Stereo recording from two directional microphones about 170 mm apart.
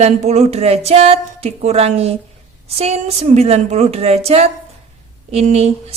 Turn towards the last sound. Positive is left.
turn(degrees=-40)  # may be behind; listen again after turning